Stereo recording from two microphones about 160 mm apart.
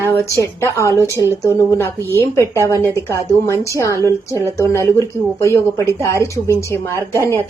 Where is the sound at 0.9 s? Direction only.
20° right (ahead or behind).